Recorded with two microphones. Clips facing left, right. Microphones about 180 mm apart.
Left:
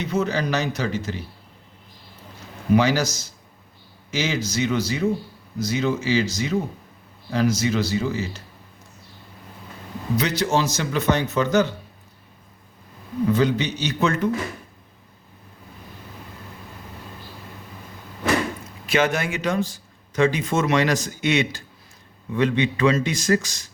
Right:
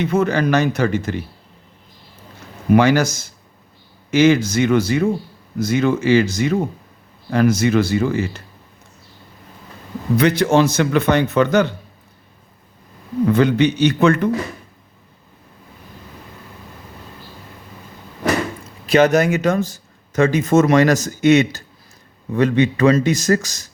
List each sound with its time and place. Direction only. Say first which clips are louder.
0.0 s a man's voice: right 6 dB; 55° right (ahead or behind)
2.7 s a man's voice: right 5 dB; 55° right (ahead or behind)
10.2 s speech: right 8 dB; 55° right (ahead or behind)
13.2 s speech: right 6 dB; 60° right (ahead or behind)
18.9 s a man's voice: right 8 dB; 40° right (ahead or behind)